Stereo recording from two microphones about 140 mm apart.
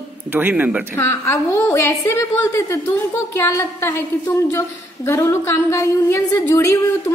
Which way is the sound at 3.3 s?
20° left (ahead or behind).